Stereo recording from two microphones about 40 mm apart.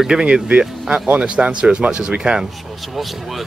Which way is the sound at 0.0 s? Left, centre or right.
Right.